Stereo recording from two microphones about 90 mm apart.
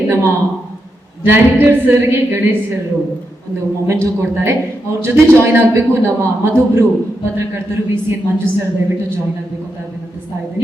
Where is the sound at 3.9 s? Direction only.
30° right (ahead or behind).